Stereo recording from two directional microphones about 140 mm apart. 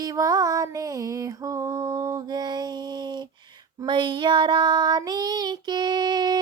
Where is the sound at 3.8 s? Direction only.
35° right (ahead or behind).